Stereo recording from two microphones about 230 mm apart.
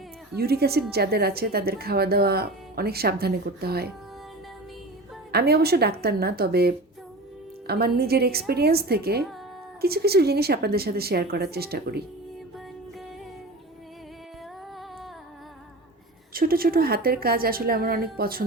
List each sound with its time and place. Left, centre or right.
0.3 s a woman's voice: right
5.3 s a woman's voice: right
16.3 s a woman's voice: right